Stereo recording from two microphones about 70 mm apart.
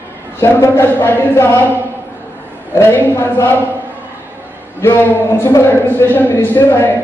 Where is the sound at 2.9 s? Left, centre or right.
Left.